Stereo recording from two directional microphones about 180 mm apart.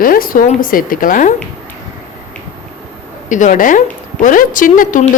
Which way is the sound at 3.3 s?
45° left (ahead or behind).